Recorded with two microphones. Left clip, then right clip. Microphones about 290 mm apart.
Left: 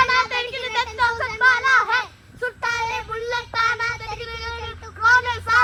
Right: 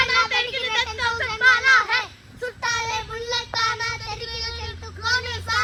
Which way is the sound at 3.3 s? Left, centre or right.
Left.